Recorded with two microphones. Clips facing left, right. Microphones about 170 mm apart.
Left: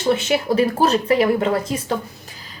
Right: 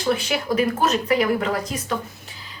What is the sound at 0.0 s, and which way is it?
Speech, 25° left (ahead or behind).